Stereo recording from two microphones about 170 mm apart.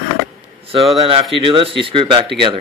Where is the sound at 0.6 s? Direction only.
35° right (ahead or behind).